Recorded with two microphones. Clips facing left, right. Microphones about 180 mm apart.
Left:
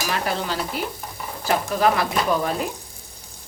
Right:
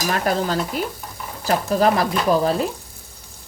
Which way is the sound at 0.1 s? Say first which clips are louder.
Right 5 dB; 45° right (ahead or behind).